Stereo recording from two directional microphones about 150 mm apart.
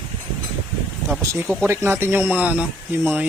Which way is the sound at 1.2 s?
20° right (ahead or behind).